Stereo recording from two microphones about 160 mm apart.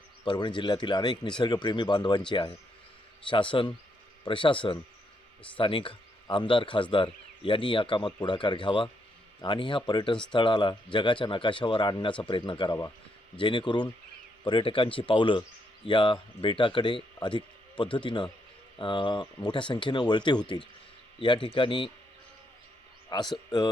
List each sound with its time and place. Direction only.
0.3 s speech: 30° left (ahead or behind)
3.2 s a man's voice: 30° left (ahead or behind)
23.1 s speech: 25° left (ahead or behind)